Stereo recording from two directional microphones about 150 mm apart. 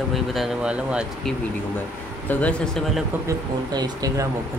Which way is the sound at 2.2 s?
5° left (ahead or behind).